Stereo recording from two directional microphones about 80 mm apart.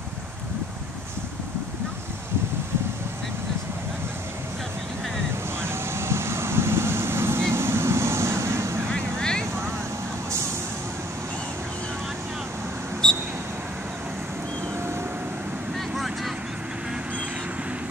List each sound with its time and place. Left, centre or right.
5.6 s vehicle: right
8.9 s vehicle: centre
13.0 s a sound: centre
15.9 s vehicle: centre